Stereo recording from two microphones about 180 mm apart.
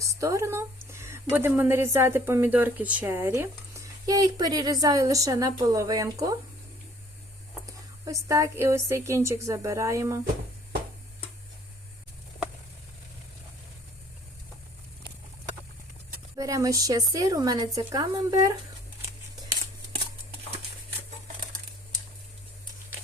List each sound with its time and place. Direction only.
0.0 s speech: 15° right (ahead or behind)
7.7 s speech: 20° right (ahead or behind)
16.4 s speech: 20° right (ahead or behind)